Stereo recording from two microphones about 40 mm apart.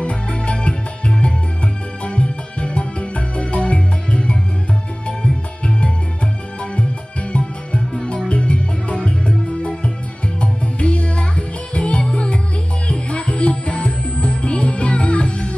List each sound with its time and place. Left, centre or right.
0.0 s music: left